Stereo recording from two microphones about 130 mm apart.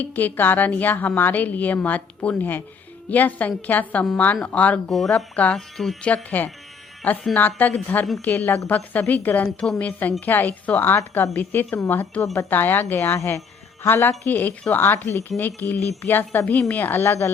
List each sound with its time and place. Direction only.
0.0 s a woman's voice: 15° left (ahead or behind)